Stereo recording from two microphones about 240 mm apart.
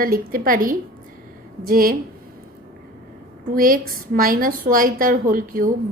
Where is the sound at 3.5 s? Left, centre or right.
Right.